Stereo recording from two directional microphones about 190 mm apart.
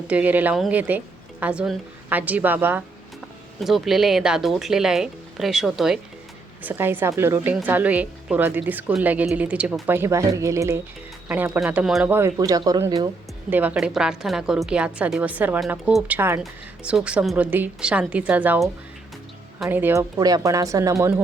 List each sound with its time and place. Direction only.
0.1 s a woman's voice: 10° right (ahead or behind)
13.5 s a woman's voice: 10° right (ahead or behind)